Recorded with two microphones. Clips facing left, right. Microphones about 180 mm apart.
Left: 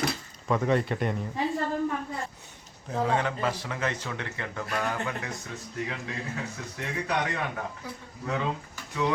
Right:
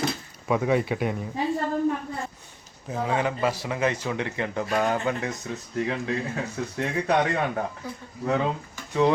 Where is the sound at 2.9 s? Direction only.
5° right (ahead or behind).